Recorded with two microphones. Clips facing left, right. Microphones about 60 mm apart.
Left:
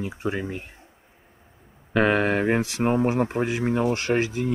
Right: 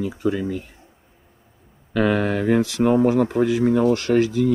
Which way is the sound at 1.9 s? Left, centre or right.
Left.